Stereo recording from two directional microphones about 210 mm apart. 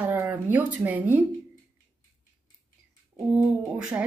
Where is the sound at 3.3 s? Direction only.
5° right (ahead or behind).